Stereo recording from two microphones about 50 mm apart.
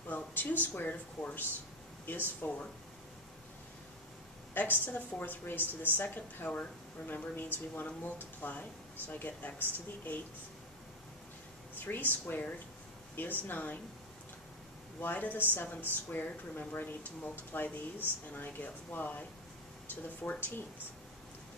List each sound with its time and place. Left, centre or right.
0.1 s speech: left
2.4 s a woman's voice: left
4.6 s a woman's voice: left
11.8 s a woman's voice: left
15.0 s a woman's voice: left